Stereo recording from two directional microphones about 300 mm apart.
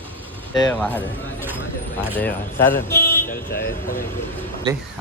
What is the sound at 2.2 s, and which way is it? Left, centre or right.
Speech, centre.